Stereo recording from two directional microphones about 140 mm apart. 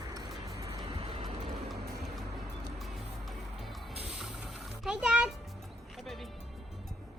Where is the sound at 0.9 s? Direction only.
40° right (ahead or behind).